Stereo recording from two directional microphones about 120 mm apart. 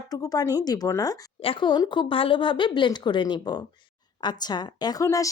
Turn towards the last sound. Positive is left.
turn(degrees=30)  # may be behind; listen again after turning